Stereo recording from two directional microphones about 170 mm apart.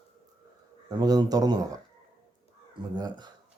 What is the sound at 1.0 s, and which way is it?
Speech, 20° right (ahead or behind).